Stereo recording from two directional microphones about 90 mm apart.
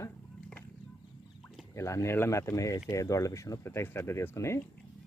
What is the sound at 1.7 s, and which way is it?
Speech, 35° left (ahead or behind).